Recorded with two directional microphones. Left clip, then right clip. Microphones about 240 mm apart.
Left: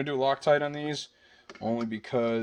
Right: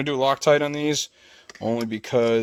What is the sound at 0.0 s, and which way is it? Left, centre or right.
Speech, right.